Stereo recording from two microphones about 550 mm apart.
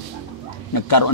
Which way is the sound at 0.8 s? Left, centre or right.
Left.